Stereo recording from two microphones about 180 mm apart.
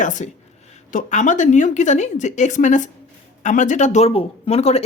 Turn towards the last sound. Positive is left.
turn(degrees=35)  # may be behind; listen again after turning